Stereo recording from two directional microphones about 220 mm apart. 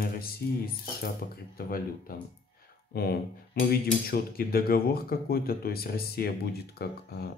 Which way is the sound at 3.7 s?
40° left (ahead or behind).